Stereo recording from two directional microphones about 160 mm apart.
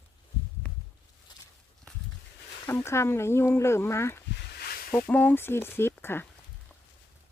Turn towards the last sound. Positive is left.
turn(degrees=15)  # may be behind; listen again after turning